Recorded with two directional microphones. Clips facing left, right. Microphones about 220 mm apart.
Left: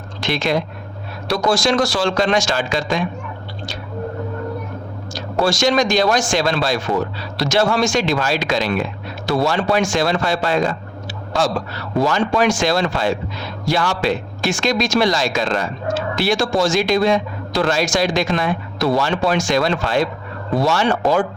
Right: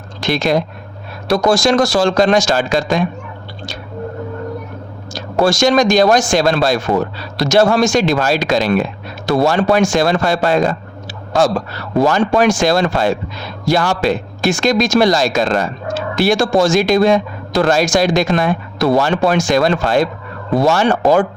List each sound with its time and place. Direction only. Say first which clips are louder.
0.2 s a man's voice: right 4 dB; 40° right (ahead or behind)
5.1 s a man's voice: right 4 dB; 45° right (ahead or behind)
11.9 s a man's voice: right 4 dB; 50° right (ahead or behind)